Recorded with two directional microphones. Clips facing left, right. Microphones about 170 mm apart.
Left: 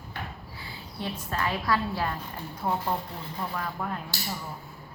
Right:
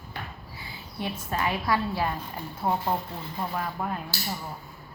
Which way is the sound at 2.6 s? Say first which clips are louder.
Right 2 dB; 25° right (ahead or behind).